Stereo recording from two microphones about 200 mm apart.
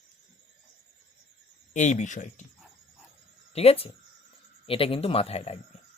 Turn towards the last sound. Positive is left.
turn(degrees=30)  # may be behind; listen again after turning